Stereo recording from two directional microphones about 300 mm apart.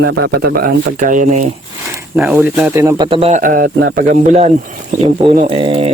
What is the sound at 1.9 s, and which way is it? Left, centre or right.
Speech, centre.